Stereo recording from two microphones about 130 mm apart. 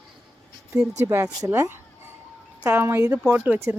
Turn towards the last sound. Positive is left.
turn(degrees=-10)  # may be behind; listen again after turning